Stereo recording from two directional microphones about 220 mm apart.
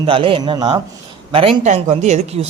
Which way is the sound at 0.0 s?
25° right (ahead or behind).